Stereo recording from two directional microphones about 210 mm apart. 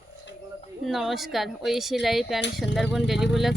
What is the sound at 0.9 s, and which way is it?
Speech, centre (ahead or behind).